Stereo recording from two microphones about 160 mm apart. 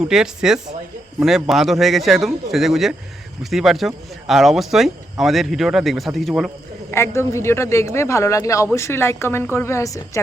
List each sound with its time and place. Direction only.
0.1 s speech: 5° right (ahead or behind)
6.9 s a man's voice: 15° left (ahead or behind)